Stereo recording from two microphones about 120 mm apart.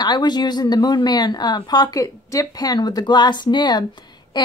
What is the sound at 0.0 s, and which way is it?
Speech, 35° left (ahead or behind).